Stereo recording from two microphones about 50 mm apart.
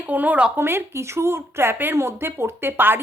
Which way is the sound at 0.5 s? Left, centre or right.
Right.